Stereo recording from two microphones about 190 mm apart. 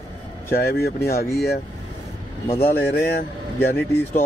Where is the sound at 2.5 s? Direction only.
55° left (ahead or behind).